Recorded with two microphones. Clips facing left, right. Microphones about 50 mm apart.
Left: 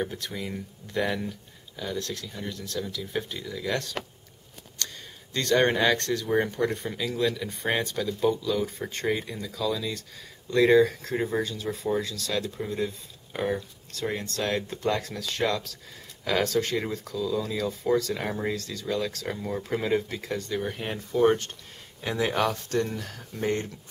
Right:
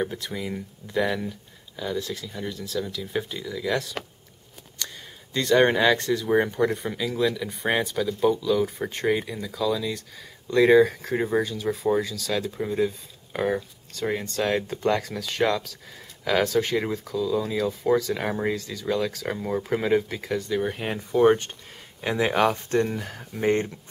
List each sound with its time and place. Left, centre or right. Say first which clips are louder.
0.1 s speech: right 3 dB; centre
22.0 s speech: right 4 dB; right